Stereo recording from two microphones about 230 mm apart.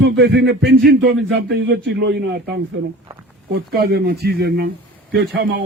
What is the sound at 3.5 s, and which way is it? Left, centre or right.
A man's voice, right.